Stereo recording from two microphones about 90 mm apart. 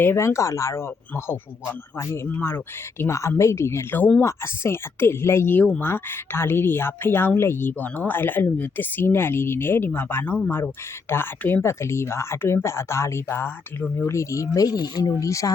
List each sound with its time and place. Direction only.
0.0 s speech: 30° left (ahead or behind)